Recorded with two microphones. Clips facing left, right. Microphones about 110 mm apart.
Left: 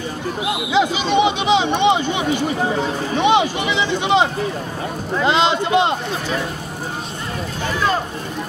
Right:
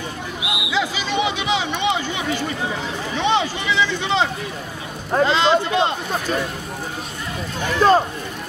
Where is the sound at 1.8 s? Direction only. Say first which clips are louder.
Left 6 dB; 20° left (ahead or behind).